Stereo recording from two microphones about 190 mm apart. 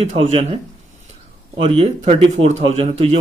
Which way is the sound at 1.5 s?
35° right (ahead or behind).